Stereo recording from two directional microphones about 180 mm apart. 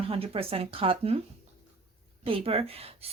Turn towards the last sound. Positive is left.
turn(degrees=-35)  # may be behind; listen again after turning